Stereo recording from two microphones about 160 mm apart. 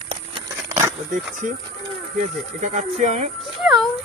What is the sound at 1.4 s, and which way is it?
Speech, 55° right (ahead or behind).